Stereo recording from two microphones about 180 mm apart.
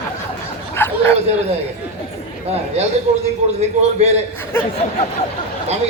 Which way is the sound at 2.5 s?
35° right (ahead or behind).